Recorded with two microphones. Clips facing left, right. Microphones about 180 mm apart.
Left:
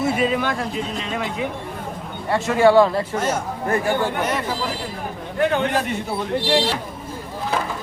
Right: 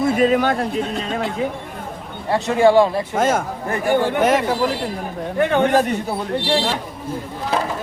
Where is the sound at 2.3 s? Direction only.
20° right (ahead or behind).